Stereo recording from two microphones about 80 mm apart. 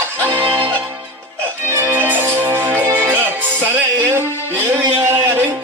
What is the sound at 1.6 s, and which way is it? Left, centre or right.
Music, right.